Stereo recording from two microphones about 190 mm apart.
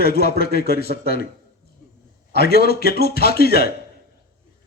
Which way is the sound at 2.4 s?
55° left (ahead or behind).